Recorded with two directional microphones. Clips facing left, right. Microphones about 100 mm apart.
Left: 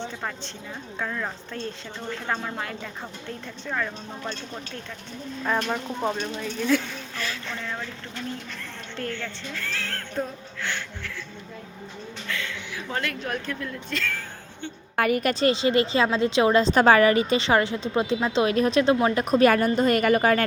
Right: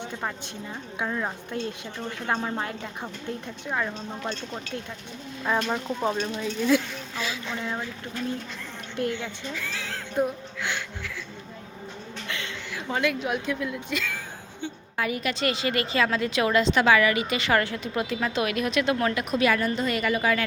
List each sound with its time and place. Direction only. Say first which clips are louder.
0.0 s a woman's voice: even; 10° right (ahead or behind)
9.0 s speech: right 4 dB; 15° right (ahead or behind)
12.3 s a sound: left 3 dB; 25° right (ahead or behind)
12.7 s a woman's voice: right 5 dB; centre (ahead or behind)
14.9 s a woman's voice: left 6 dB; 55° left (ahead or behind)